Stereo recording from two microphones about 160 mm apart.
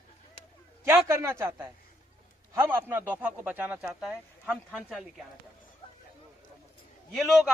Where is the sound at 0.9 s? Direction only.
15° right (ahead or behind).